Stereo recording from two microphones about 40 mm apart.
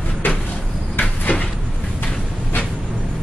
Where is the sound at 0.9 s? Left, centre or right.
Left.